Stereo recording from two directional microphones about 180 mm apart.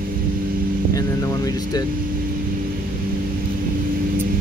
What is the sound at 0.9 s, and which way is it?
Speech, 20° left (ahead or behind).